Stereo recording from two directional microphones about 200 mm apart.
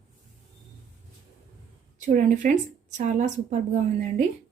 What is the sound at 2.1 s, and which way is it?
Speech, 40° right (ahead or behind).